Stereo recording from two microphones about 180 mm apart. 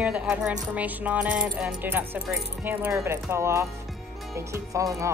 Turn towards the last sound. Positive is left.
turn(degrees=-20)  # may be behind; listen again after turning